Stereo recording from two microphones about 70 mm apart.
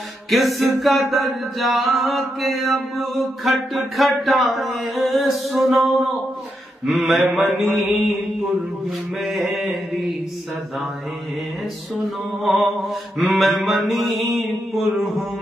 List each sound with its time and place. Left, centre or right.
0.3 s singing: centre
6.9 s singing: centre
9.2 s singing: centre
12.0 s singing: centre